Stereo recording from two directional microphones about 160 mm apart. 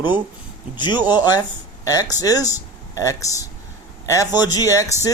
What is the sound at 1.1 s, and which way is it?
A man's voice, 25° left (ahead or behind).